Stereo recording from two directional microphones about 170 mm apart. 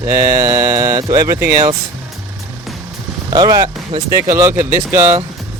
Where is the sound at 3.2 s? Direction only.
25° right (ahead or behind).